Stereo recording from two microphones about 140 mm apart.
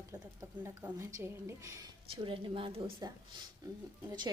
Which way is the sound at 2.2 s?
40° right (ahead or behind).